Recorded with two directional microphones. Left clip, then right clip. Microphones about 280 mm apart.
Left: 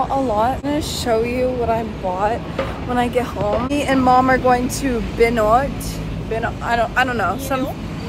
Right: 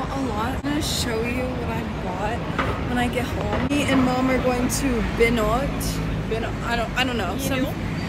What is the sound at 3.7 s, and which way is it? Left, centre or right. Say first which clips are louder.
Speech: left 6 dB; centre.